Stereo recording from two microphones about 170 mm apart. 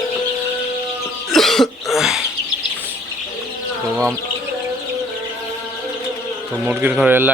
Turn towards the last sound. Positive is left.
turn(degrees=-10)  # may be behind; listen again after turning